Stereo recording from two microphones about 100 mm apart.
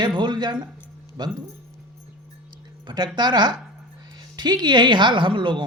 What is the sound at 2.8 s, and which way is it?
Speech, 50° right (ahead or behind).